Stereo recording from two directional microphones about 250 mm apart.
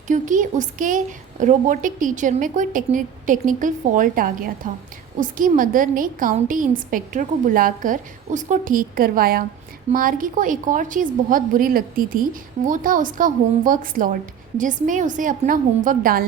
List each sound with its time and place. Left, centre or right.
0.1 s a woman's voice: right